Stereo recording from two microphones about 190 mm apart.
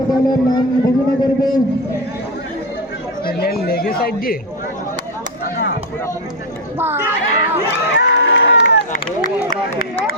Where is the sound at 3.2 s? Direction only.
50° left (ahead or behind).